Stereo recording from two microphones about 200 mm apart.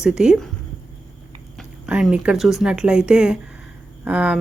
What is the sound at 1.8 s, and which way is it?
Speech, 5° right (ahead or behind).